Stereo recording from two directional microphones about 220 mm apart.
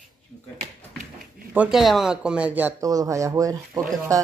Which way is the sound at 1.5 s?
5° right (ahead or behind).